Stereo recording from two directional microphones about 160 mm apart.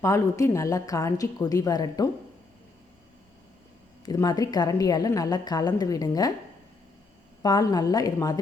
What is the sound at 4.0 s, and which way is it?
Speech, 25° left (ahead or behind).